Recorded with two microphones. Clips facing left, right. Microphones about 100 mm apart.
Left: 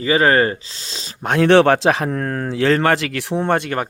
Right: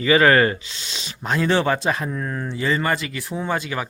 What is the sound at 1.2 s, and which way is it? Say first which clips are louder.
Speech: left 8 dB; 65° left (ahead or behind).